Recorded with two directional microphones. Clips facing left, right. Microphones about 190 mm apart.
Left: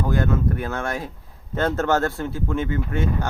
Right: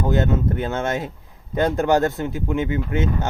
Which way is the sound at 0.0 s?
20° right (ahead or behind).